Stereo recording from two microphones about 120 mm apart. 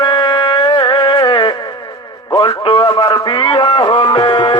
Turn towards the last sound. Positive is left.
turn(degrees=40)  # may be behind; listen again after turning